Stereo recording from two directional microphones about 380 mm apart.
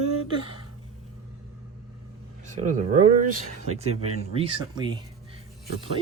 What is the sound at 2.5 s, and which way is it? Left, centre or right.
Speech, centre.